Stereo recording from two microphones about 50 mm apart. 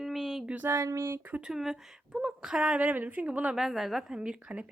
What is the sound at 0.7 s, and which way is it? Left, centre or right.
Speech, right.